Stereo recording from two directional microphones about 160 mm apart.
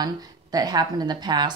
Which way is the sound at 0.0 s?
25° right (ahead or behind).